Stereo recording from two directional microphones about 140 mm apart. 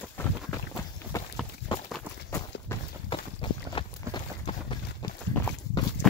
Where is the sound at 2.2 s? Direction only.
20° left (ahead or behind).